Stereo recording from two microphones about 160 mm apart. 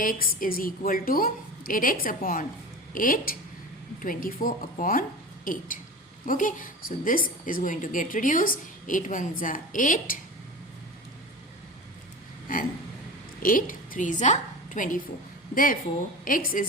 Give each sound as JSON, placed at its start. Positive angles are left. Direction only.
{"t": 0.0, "sound": "a woman's voice", "side_deg": 60}
{"t": 13.4, "sound": "a woman's voice", "side_deg": 60}